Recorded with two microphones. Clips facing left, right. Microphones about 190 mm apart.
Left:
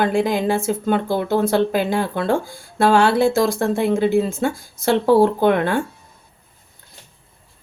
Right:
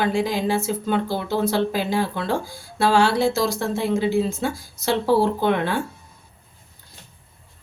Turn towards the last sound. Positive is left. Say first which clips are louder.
# left 4 dB
turn(degrees=50)  # may be behind; listen again after turning